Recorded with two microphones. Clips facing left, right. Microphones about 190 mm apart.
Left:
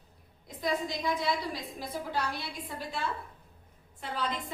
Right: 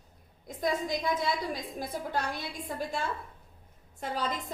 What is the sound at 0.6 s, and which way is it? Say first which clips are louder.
A woman's voice: right 2 dB; 50° right (ahead or behind).